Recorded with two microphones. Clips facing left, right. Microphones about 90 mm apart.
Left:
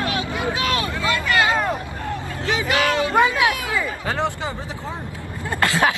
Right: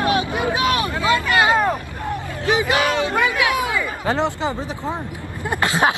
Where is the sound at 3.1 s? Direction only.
20° left (ahead or behind).